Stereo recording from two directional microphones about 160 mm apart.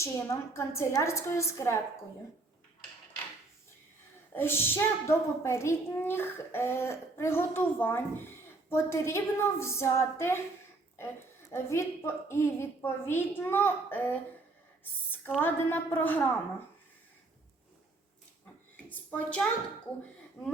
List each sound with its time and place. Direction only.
0.0 s a woman's voice: 15° left (ahead or behind)
4.4 s a woman's voice: 15° left (ahead or behind)
11.5 s a woman's voice: 15° left (ahead or behind)
15.4 s a woman's voice: 10° left (ahead or behind)
18.9 s a woman's voice: 10° left (ahead or behind)